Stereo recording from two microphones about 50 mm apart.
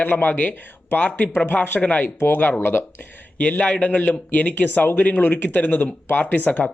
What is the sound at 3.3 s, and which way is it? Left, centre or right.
Speech, left.